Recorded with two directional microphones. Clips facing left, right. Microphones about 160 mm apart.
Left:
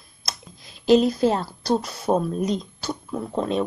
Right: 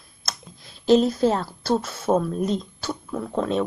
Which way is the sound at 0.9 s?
Centre (ahead or behind).